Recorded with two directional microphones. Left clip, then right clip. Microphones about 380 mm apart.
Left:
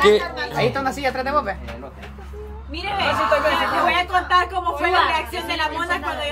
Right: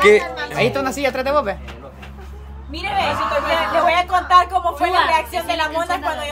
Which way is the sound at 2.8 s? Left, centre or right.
Centre.